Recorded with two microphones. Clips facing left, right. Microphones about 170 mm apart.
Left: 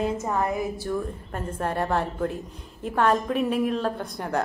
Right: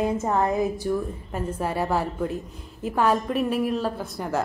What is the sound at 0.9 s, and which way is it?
A woman's voice, 5° right (ahead or behind).